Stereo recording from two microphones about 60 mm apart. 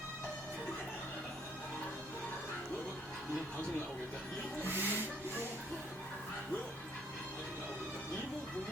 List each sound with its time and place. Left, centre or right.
4.6 s speech: right